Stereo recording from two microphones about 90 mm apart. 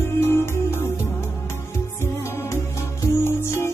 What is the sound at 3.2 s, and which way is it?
Music, 30° left (ahead or behind).